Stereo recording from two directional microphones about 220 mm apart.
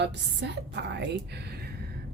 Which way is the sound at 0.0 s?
50° right (ahead or behind).